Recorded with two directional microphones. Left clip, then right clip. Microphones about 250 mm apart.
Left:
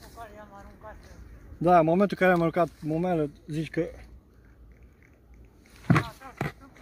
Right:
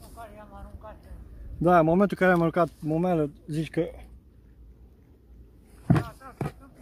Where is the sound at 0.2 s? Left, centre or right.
Right.